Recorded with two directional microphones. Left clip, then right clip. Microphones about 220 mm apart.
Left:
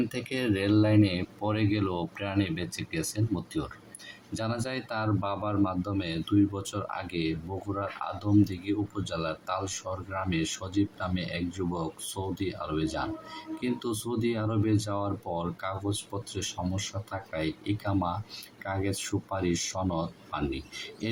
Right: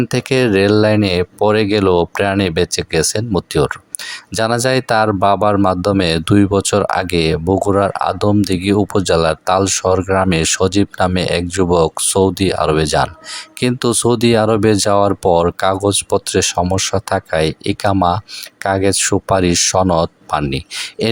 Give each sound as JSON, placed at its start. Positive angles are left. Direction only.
{"t": 0.1, "sound": "speech", "side_deg": -50}